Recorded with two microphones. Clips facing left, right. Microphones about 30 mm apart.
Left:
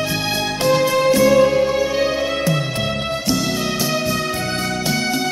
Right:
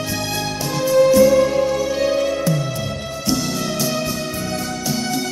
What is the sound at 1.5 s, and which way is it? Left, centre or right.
Music, left.